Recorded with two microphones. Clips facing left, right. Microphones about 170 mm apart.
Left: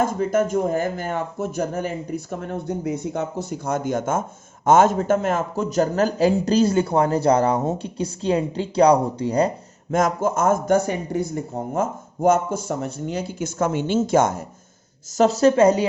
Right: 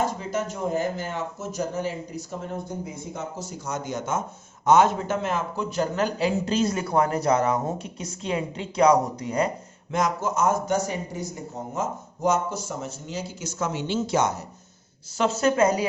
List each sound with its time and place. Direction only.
0.0 s speech: 50° left (ahead or behind); by 9.5 s 30° left (ahead or behind)
9.9 s speech: 50° left (ahead or behind)
15.2 s speech: 35° left (ahead or behind)